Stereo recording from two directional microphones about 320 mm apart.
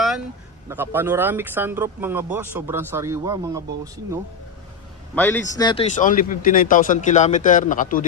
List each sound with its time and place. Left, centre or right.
0.7 s speech: centre
5.1 s speech: centre; by 8.0 s left